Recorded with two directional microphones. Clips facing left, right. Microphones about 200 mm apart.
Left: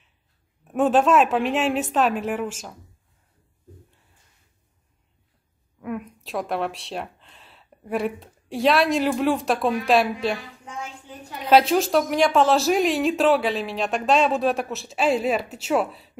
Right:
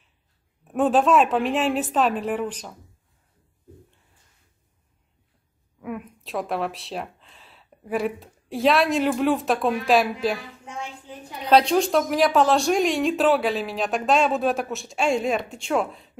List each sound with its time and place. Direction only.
0.7 s speech: centre (ahead or behind)
5.8 s speech: centre (ahead or behind)
11.4 s speech: 5° left (ahead or behind)